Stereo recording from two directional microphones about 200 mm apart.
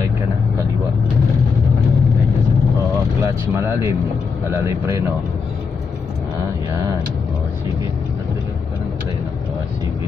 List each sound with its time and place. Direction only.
3.2 s speech: 15° right (ahead or behind)